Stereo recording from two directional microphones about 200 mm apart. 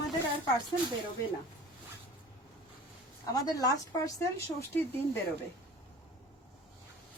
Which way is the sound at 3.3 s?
20° left (ahead or behind).